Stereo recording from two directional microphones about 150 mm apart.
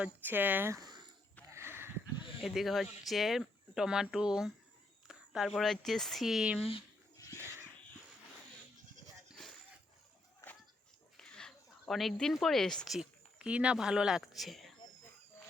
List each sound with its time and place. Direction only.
0.0 s speech: 10° right (ahead or behind)
1.5 s a sound: 15° right (ahead or behind)
2.4 s speech: centre (ahead or behind)
6.6 s speech: 40° left (ahead or behind)
9.4 s a sound: 5° left (ahead or behind)
11.2 s speech: 5° left (ahead or behind)